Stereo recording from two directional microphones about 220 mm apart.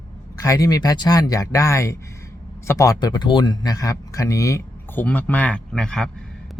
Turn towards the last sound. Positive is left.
turn(degrees=5)  # may be behind; listen again after turning